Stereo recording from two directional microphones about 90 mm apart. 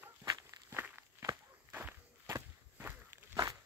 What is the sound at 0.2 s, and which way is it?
Walk, 45° right (ahead or behind).